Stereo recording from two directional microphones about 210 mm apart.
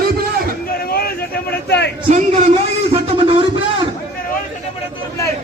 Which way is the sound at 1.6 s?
55° left (ahead or behind).